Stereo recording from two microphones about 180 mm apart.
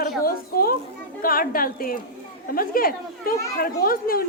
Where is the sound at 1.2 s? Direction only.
55° left (ahead or behind).